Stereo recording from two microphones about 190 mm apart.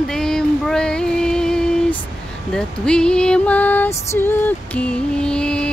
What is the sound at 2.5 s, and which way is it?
Music, 5° left (ahead or behind).